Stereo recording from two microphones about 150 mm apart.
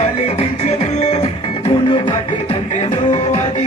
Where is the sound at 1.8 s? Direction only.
35° left (ahead or behind).